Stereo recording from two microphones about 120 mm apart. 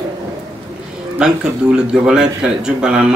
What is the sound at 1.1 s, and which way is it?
A man's voice, 5° right (ahead or behind).